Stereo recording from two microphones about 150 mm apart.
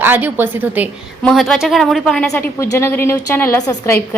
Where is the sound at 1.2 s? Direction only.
Centre (ahead or behind).